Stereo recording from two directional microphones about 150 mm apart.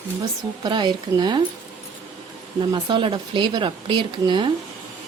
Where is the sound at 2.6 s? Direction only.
30° right (ahead or behind).